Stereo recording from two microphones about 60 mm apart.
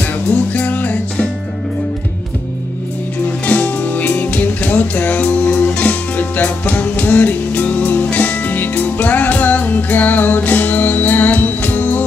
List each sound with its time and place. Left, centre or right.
0.3 s music: left
3.4 s music: left